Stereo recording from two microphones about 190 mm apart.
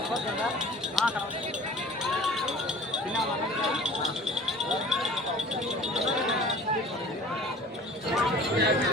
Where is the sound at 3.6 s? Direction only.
Centre (ahead or behind).